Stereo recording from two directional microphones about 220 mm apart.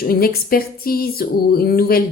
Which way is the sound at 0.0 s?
45° left (ahead or behind).